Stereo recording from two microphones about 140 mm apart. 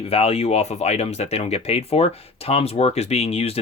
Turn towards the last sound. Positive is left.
turn(degrees=45)  # may be behind; listen again after turning